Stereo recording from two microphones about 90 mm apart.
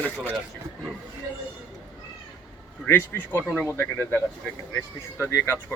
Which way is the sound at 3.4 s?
10° left (ahead or behind).